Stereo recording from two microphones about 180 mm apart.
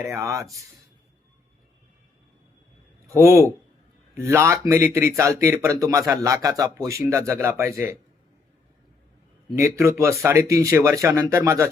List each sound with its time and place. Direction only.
0.0 s speech: 15° right (ahead or behind)
3.1 s speech: 15° right (ahead or behind)
9.6 s speech: 15° right (ahead or behind)